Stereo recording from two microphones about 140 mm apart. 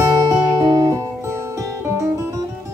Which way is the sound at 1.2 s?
15° right (ahead or behind).